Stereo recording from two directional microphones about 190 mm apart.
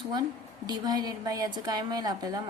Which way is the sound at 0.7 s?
20° right (ahead or behind).